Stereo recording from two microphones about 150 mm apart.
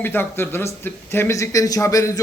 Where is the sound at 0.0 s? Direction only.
15° left (ahead or behind).